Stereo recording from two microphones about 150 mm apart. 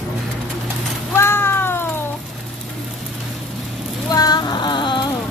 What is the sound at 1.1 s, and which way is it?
Cat, 15° left (ahead or behind).